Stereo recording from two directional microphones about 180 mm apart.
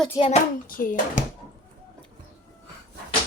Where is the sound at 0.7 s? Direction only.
50° left (ahead or behind).